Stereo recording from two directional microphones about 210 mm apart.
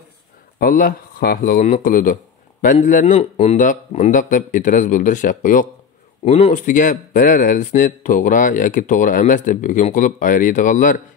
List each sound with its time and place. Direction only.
0.6 s speech: 45° left (ahead or behind)